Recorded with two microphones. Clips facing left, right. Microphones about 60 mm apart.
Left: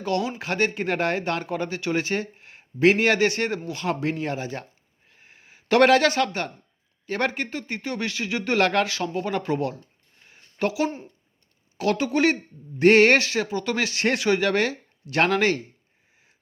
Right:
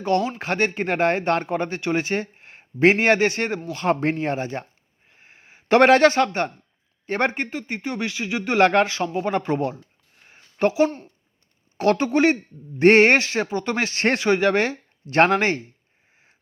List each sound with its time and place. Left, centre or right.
0.0 s speech: right
7.5 s speech: right
10.2 s a sound: right
10.8 s speech: centre
11.8 s speech: right